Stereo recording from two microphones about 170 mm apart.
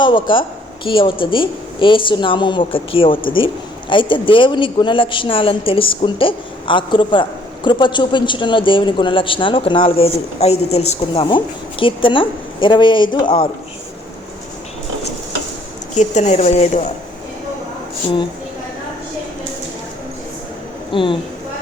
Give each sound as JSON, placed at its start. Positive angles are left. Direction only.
{"t": 0.0, "sound": "a man's voice", "side_deg": 30}
{"t": 16.0, "sound": "speech", "side_deg": 45}
{"t": 20.9, "sound": "a man's voice", "side_deg": 30}